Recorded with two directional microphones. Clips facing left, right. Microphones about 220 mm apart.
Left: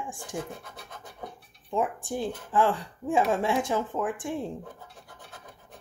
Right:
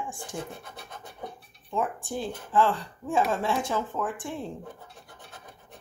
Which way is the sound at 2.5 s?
15° left (ahead or behind).